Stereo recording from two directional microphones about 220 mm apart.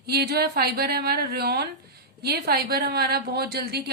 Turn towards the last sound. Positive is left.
turn(degrees=-45)  # may be behind; listen again after turning